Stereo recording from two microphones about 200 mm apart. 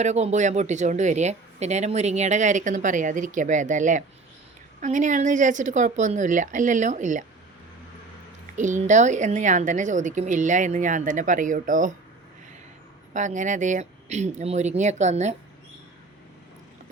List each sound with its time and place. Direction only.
0.0 s speech: 35° right (ahead or behind)
8.5 s speech: 40° right (ahead or behind)
13.1 s speech: 40° right (ahead or behind)